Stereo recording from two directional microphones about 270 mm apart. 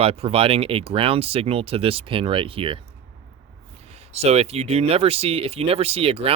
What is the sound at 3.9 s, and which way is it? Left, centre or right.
A man's voice, right.